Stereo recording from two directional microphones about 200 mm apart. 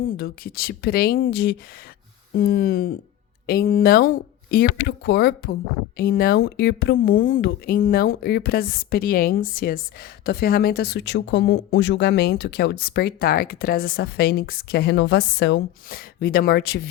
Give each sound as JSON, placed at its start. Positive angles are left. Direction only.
{"t": 0.0, "sound": "speech", "side_deg": 45}